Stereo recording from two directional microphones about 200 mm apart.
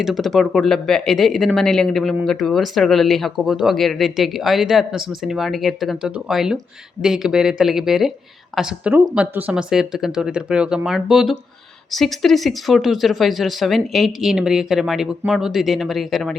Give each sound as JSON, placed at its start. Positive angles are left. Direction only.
{"t": 0.0, "sound": "speech", "side_deg": 0}